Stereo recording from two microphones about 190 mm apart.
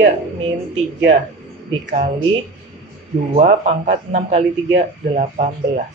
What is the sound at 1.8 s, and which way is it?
Speech, 40° right (ahead or behind).